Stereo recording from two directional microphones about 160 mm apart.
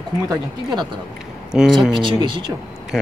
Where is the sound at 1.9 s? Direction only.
30° right (ahead or behind).